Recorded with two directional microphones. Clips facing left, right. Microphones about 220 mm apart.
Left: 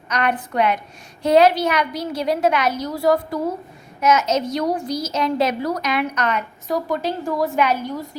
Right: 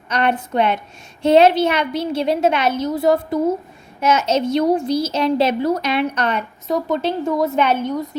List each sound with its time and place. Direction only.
0.1 s a woman's voice: 30° right (ahead or behind)